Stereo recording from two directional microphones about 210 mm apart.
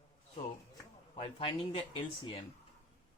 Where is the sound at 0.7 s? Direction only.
25° left (ahead or behind).